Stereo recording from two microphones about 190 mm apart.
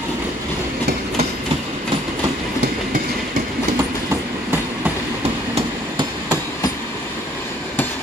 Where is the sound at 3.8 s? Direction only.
15° right (ahead or behind).